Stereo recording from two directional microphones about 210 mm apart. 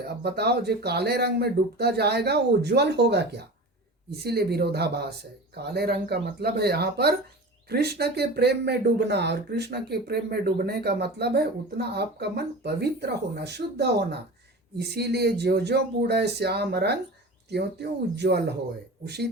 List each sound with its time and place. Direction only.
0.0 s speech: 50° right (ahead or behind)